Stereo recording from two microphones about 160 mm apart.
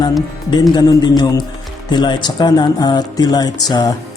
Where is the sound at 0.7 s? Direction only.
25° left (ahead or behind).